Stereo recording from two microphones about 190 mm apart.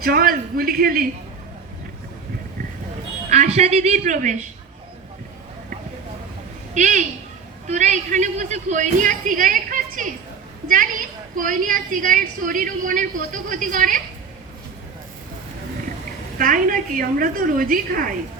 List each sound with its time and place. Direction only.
0.0 s a sound: 50° right (ahead or behind)
3.2 s a woman's voice: 35° right (ahead or behind)
6.7 s a woman's voice: 40° right (ahead or behind)
11.3 s a woman's voice: 45° right (ahead or behind)
16.4 s a woman's voice: 45° right (ahead or behind)